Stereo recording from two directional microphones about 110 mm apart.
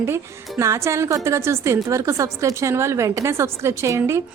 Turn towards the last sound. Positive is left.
turn(degrees=-25)  # may be behind; listen again after turning